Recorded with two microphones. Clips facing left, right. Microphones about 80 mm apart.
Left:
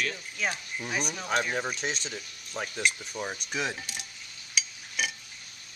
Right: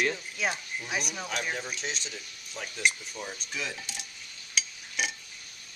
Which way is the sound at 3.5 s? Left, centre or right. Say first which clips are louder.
Left 5 dB; left.